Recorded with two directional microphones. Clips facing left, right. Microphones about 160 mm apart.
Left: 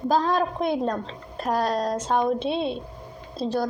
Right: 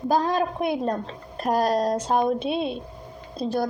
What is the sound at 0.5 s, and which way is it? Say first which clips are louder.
Speech: even; 10° right (ahead or behind).